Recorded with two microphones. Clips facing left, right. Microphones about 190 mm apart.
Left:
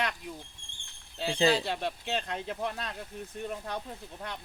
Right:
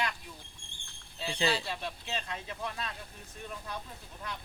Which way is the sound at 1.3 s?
40° left (ahead or behind).